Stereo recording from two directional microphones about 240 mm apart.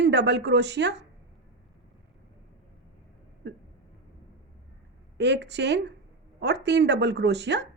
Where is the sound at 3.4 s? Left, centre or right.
Right.